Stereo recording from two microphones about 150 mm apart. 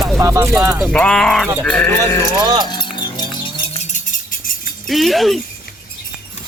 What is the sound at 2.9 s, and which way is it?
Wind chime, 30° left (ahead or behind).